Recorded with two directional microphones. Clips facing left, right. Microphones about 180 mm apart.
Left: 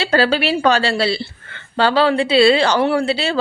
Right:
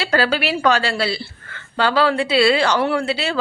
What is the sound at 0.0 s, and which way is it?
A woman's voice, 30° left (ahead or behind).